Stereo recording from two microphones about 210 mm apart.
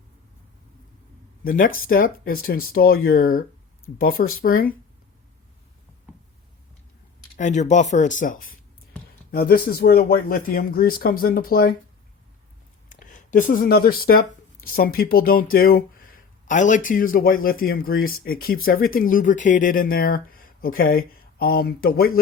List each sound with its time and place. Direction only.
1.5 s speech: 40° left (ahead or behind)
7.3 s speech: 35° left (ahead or behind)
12.9 s speech: 40° left (ahead or behind)